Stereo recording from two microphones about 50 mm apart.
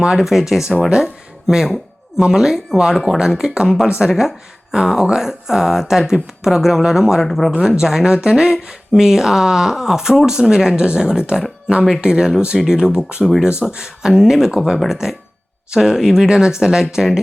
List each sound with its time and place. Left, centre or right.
0.0 s speech: centre
7.3 s speech: centre
7.8 s speech: centre